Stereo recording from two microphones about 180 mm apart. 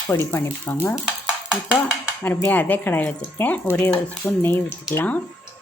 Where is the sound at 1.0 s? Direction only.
5° right (ahead or behind).